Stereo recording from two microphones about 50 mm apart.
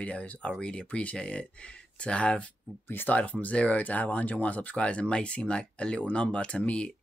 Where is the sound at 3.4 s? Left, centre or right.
Left.